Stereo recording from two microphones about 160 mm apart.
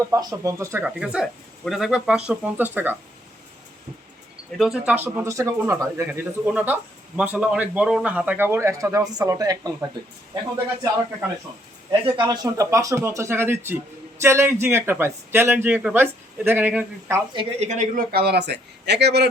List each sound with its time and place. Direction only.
0.1 s speech: 20° right (ahead or behind)
4.5 s speech: centre (ahead or behind)
5.0 s a man's voice: 15° right (ahead or behind)
11.9 s a man's voice: 25° right (ahead or behind); by 17.2 s 10° right (ahead or behind)
17.6 s speech: 50° right (ahead or behind)
18.1 s speech: 85° right